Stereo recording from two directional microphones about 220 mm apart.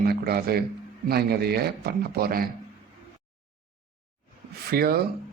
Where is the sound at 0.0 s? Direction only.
45° right (ahead or behind).